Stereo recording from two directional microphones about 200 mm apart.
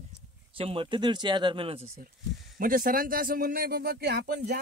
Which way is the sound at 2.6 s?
45° right (ahead or behind).